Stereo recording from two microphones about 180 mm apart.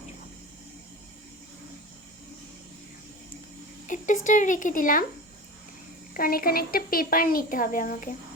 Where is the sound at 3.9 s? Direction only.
45° left (ahead or behind).